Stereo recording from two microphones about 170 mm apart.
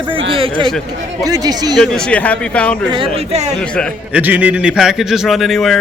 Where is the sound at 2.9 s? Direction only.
35° right (ahead or behind).